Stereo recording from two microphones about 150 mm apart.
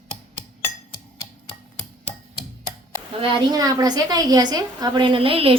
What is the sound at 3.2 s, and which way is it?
A woman's voice, 25° right (ahead or behind).